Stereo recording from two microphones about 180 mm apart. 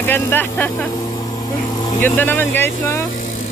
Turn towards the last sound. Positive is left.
turn(degrees=10)  # may be behind; listen again after turning